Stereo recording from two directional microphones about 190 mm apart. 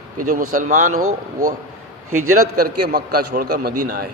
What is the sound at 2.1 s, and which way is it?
Speech, 90° right.